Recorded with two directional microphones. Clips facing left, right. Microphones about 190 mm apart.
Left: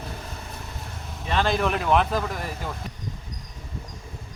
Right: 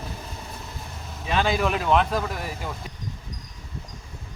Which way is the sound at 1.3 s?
5° right (ahead or behind).